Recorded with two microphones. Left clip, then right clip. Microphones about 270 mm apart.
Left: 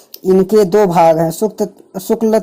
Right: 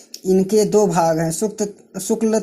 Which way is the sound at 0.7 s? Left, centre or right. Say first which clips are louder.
Left 8 dB; left.